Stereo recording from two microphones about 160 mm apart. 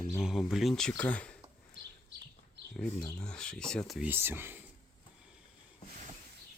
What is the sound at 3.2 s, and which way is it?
Speech, 5° left (ahead or behind).